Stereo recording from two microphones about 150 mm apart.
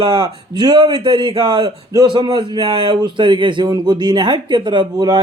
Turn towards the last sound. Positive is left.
turn(degrees=-25)  # may be behind; listen again after turning